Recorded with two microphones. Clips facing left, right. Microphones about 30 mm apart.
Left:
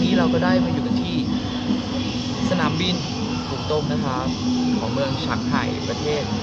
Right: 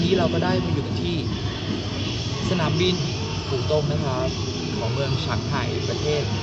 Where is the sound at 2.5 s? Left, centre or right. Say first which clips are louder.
Right 1 dB; centre.